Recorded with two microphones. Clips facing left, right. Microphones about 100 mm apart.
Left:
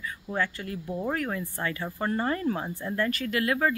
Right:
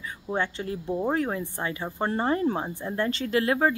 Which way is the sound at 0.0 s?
25° right (ahead or behind).